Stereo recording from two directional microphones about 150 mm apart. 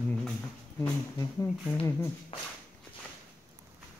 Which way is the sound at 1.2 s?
15° left (ahead or behind).